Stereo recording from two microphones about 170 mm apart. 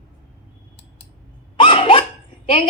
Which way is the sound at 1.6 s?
30° left (ahead or behind).